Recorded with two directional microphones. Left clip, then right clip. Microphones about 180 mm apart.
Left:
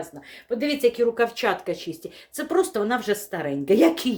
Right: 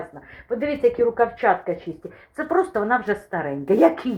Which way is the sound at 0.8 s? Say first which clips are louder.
Right 2 dB; 25° left (ahead or behind).